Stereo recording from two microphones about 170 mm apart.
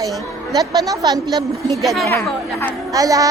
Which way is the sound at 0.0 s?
20° right (ahead or behind).